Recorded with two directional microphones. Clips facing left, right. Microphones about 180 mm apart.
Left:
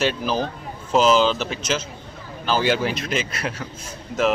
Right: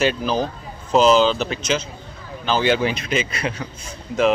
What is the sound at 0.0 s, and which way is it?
A man's voice, centre (ahead or behind).